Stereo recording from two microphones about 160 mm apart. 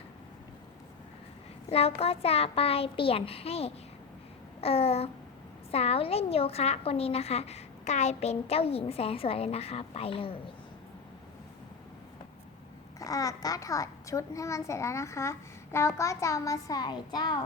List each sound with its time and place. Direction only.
1.7 s a woman's voice: 40° left (ahead or behind)
13.0 s a child's voice: 20° left (ahead or behind)